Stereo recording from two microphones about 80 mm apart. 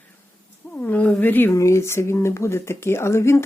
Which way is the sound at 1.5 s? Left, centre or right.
Left.